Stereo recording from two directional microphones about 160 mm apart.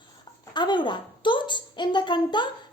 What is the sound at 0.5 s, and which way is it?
A woman's voice, 30° left (ahead or behind).